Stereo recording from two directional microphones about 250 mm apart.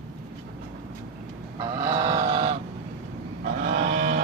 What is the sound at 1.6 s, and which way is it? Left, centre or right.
Fowl, centre.